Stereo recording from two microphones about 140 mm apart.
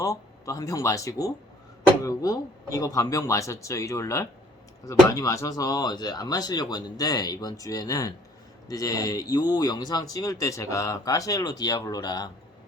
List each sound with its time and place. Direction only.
0.0 s speech: 25° left (ahead or behind)